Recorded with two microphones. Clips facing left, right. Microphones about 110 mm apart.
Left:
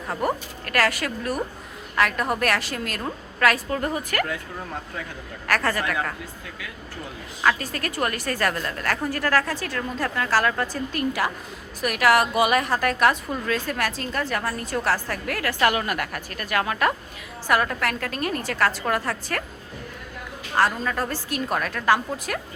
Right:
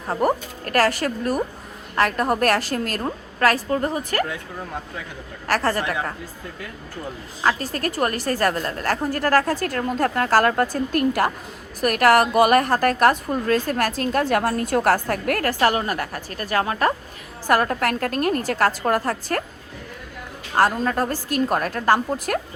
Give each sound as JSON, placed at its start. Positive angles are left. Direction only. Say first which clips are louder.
{"t": 0.6, "sound": "a woman's voice", "louder": "right 4 dB", "side_deg": -40}
{"t": 5.5, "sound": "speech", "louder": "right 2 dB", "side_deg": -35}
{"t": 7.4, "sound": "a woman's voice", "louder": "right 1 dB", "side_deg": -35}
{"t": 14.0, "sound": "a woman's voice", "louder": "right 7 dB", "side_deg": -55}
{"t": 20.6, "sound": "a woman's voice", "louder": "right 3 dB", "side_deg": -40}